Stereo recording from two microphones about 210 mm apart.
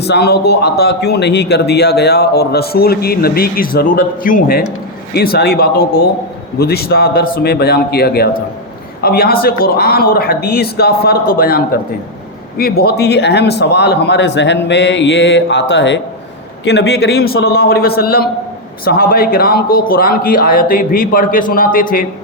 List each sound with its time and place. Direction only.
0.0 s a man's voice: 50° left (ahead or behind)